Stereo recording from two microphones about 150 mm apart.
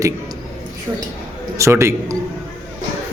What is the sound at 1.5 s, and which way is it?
Speech, 20° right (ahead or behind).